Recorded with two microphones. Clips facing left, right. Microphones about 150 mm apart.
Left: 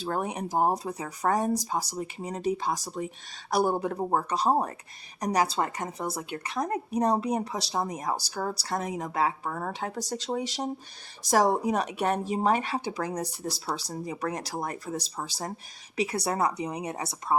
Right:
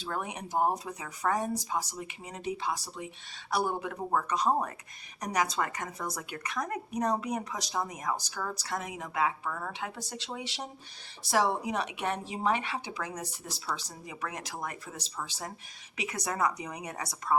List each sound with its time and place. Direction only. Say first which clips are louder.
0.0 s a woman's voice: left 6 dB; 40° left (ahead or behind)